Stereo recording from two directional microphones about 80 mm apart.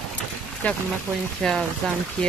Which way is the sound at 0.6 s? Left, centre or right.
Centre.